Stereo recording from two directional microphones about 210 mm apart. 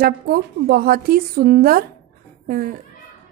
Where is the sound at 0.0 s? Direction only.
45° right (ahead or behind).